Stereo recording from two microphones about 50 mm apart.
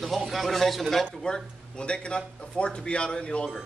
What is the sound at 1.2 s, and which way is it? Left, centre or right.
Speech, centre.